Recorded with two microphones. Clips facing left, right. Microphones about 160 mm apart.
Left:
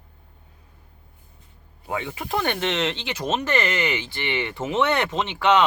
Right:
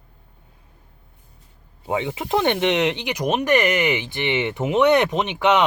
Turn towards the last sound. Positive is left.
turn(degrees=-20)  # may be behind; listen again after turning